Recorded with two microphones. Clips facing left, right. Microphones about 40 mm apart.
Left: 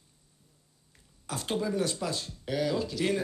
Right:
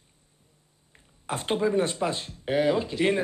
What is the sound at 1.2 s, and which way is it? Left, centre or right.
Speech, right.